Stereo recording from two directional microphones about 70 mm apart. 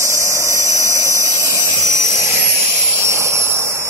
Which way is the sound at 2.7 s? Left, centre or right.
Right.